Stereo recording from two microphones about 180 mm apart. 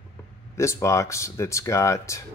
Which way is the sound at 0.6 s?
15° left (ahead or behind).